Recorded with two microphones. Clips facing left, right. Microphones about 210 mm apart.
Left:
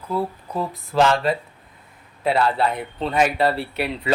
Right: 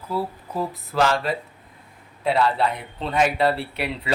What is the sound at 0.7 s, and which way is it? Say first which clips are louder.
Speech: left 4 dB; centre (ahead or behind).